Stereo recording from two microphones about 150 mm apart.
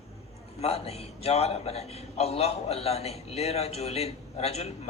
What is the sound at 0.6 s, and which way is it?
A man's voice, 40° left (ahead or behind).